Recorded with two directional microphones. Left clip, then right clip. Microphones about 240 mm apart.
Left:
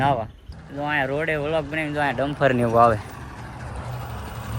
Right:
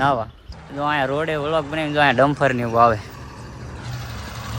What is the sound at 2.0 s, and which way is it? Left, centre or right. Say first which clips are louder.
Speech: right 9 dB; right.